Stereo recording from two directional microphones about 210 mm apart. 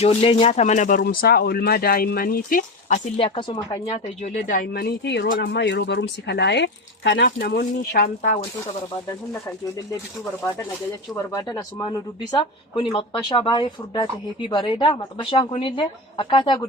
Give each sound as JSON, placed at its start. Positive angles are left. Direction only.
{"t": 0.0, "sound": "speech", "side_deg": 30}
{"t": 4.7, "sound": "speech", "side_deg": 50}
{"t": 7.3, "sound": "speech", "side_deg": 40}
{"t": 11.1, "sound": "speech", "side_deg": 15}